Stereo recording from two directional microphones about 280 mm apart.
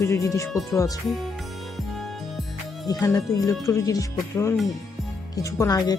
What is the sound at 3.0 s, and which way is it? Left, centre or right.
Speech, centre.